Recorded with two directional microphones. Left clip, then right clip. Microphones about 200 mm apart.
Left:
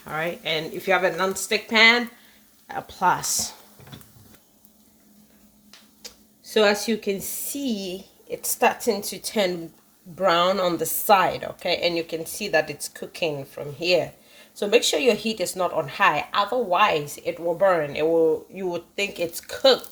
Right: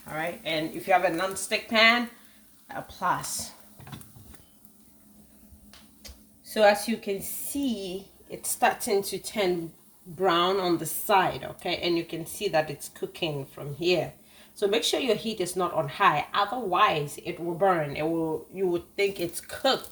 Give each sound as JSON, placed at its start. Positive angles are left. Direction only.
{"t": 0.1, "sound": "speech", "side_deg": 50}
{"t": 6.0, "sound": "speech", "side_deg": 45}